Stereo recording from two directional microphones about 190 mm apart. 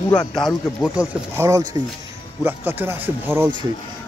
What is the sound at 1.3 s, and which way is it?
Speech, 15° right (ahead or behind).